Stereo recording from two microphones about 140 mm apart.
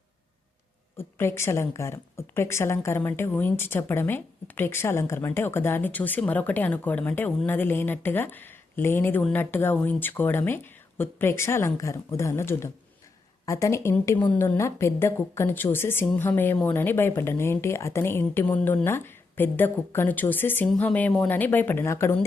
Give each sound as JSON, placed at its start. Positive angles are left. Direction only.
{"t": 0.9, "sound": "a woman's voice", "side_deg": 20}